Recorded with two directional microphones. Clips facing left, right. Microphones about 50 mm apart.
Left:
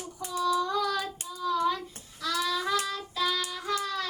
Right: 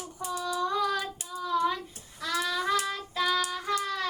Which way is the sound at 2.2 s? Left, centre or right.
Right.